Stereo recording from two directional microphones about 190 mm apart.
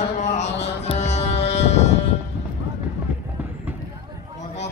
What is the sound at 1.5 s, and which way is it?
Sheep, 35° left (ahead or behind).